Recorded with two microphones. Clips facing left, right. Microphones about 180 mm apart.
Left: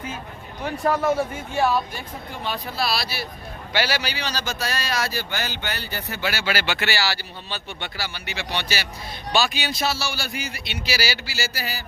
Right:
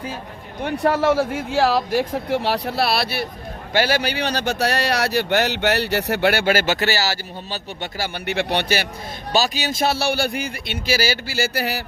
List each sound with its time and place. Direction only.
0.9 s speech: 80° right; by 3.2 s 60° right (ahead or behind)
3.7 s speech: 50° right (ahead or behind)
9.3 s speech: 40° right (ahead or behind); by 11.8 s 60° right (ahead or behind)